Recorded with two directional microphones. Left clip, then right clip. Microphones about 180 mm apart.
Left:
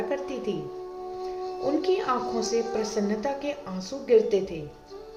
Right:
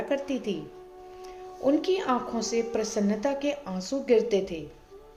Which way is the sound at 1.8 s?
35° right (ahead or behind).